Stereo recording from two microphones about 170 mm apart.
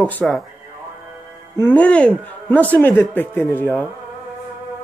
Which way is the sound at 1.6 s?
10° left (ahead or behind).